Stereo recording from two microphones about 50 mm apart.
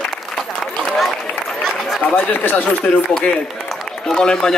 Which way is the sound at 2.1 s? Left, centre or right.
Left.